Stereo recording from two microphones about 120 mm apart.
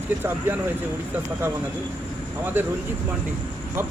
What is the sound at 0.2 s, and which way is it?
Speech, 20° right (ahead or behind).